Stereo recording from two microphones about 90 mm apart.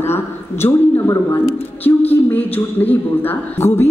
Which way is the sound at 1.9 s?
20° left (ahead or behind).